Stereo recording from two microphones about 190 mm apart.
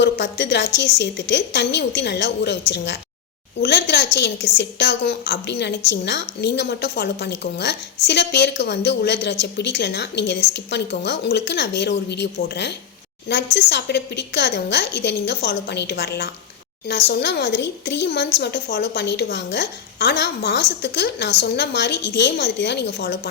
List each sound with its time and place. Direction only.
0.0 s a woman's voice: 65° left (ahead or behind)